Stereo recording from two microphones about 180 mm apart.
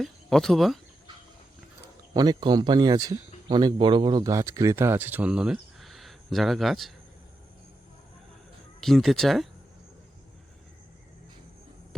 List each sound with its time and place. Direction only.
0.0 s speech: centre (ahead or behind)
2.1 s speech: 20° right (ahead or behind); by 6.9 s centre (ahead or behind)
8.8 s speech: centre (ahead or behind)